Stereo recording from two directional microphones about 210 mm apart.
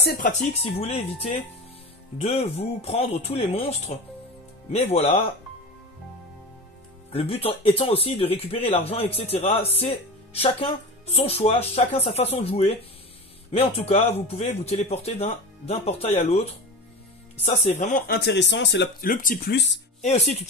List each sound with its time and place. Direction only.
0.0 s speech: 45° left (ahead or behind)
7.1 s speech: 30° left (ahead or behind)
17.4 s speech: 35° left (ahead or behind); by 19.0 s 55° left (ahead or behind)
19.0 s speech: 40° left (ahead or behind); by 19.8 s 55° left (ahead or behind)
20.0 s speech: 30° left (ahead or behind)